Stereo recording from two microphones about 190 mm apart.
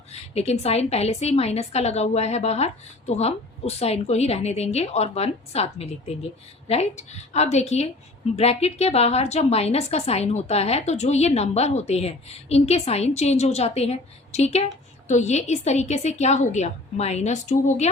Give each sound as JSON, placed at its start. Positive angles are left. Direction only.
{"t": 0.1, "sound": "a woman's voice", "side_deg": 35}